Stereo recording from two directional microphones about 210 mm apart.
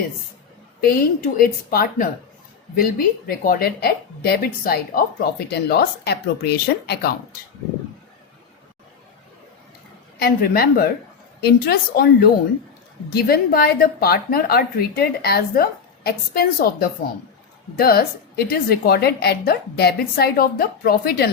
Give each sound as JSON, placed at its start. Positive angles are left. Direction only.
{"t": 0.8, "sound": "a woman's voice", "side_deg": 45}
{"t": 3.2, "sound": "a woman's voice", "side_deg": 45}
{"t": 10.2, "sound": "a woman's voice", "side_deg": 45}